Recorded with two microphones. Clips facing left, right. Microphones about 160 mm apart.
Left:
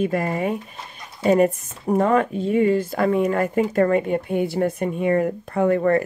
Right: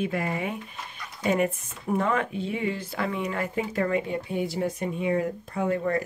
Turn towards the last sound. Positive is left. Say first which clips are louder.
# left 8 dB
turn(degrees=60)  # may be behind; listen again after turning